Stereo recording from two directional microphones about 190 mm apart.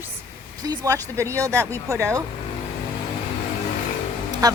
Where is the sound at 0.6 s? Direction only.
15° right (ahead or behind).